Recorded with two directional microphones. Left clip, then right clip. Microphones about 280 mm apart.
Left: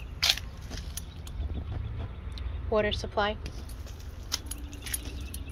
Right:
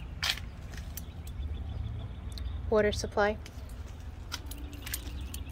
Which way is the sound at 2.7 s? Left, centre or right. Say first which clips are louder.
Even; right.